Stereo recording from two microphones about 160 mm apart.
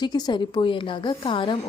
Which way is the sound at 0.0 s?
25° left (ahead or behind).